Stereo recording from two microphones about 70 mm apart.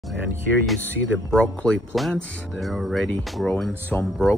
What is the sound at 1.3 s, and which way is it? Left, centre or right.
Speech, centre.